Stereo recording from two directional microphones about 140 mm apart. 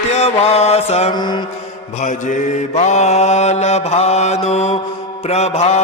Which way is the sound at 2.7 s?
55° left (ahead or behind).